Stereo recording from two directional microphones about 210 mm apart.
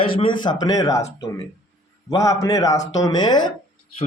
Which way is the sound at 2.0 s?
15° left (ahead or behind).